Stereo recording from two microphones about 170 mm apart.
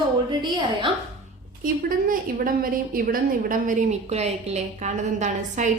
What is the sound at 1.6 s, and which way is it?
A woman's voice, 55° right (ahead or behind).